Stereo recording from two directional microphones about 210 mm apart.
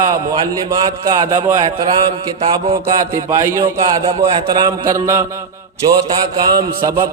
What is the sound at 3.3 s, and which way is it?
A man's voice, 15° right (ahead or behind).